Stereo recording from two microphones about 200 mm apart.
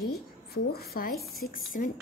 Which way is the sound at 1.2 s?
Centre (ahead or behind).